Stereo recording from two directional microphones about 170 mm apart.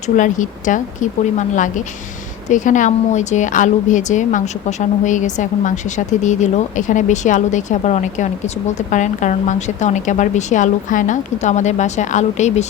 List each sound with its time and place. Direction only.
0.2 s a woman's voice: 50° left (ahead or behind)